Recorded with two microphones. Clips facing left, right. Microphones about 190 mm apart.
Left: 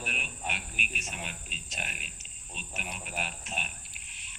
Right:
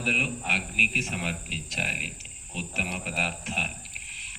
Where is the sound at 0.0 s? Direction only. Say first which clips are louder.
Right 8 dB; 75° right (ahead or behind).